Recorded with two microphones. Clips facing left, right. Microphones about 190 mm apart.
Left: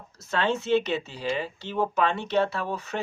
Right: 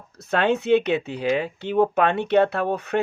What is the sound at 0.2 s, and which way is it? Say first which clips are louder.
Speech: right 5 dB; 60° right (ahead or behind).